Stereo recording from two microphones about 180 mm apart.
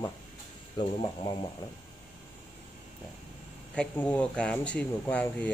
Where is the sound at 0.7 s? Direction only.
30° left (ahead or behind).